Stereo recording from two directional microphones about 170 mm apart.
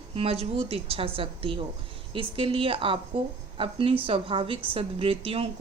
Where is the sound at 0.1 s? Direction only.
35° right (ahead or behind).